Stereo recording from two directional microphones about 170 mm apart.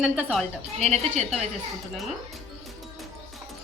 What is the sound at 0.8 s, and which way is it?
Speech, 40° right (ahead or behind).